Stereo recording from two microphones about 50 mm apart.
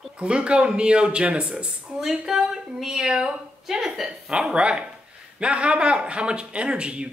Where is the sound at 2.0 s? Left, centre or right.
Centre.